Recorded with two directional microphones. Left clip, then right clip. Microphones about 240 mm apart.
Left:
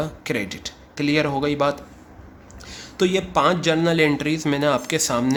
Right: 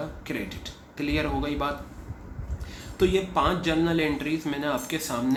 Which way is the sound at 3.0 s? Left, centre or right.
Left.